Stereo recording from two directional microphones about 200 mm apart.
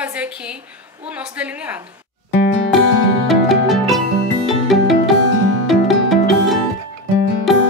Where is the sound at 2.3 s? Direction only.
55° left (ahead or behind).